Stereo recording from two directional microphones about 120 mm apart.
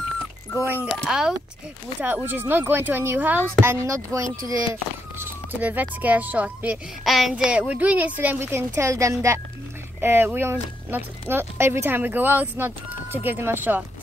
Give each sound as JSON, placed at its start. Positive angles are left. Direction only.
{"t": 0.9, "sound": "speech", "side_deg": -5}
{"t": 2.0, "sound": "speech", "side_deg": -15}
{"t": 5.2, "sound": "speech", "side_deg": -15}